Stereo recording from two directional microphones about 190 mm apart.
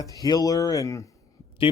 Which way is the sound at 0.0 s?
20° left (ahead or behind).